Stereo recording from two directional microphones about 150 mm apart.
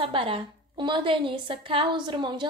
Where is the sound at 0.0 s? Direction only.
35° right (ahead or behind).